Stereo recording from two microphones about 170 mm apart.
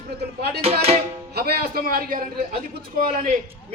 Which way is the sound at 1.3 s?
65° right (ahead or behind).